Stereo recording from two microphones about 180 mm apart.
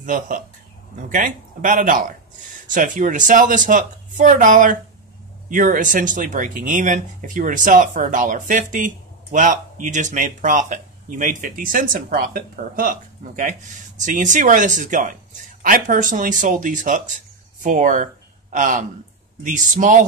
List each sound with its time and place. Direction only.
0.0 s speech: 50° right (ahead or behind)